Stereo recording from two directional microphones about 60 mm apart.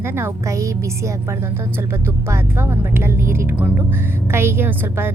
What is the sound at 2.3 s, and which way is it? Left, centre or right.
A woman's voice, right.